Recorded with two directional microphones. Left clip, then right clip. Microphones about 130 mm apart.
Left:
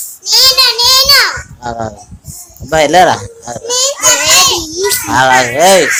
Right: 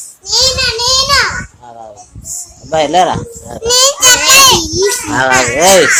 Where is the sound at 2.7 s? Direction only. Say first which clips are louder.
Left 3 dB; 50° left (ahead or behind).